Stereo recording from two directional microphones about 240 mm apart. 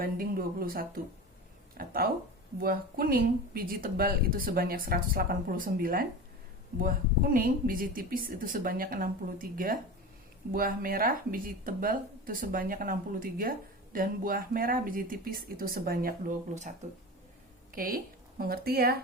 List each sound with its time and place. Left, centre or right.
0.0 s speech: right
17.7 s speech: right